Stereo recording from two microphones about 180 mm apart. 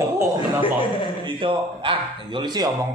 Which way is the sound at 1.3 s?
30° right (ahead or behind).